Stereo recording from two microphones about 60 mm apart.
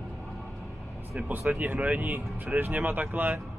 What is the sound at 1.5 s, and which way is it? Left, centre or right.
Speech, right.